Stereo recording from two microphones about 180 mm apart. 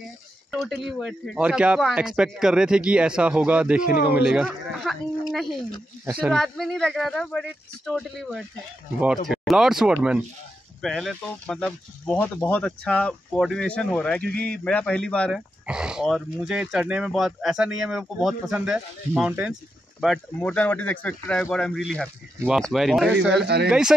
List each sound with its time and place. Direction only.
0.5 s speech: centre (ahead or behind)
23.4 s speech: 65° right (ahead or behind)